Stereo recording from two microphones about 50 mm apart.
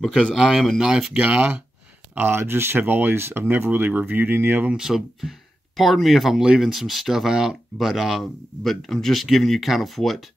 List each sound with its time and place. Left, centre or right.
0.0 s speech: centre
0.8 s speech: centre
1.1 s speech: right
2.3 s speech: right
4.7 s speech: centre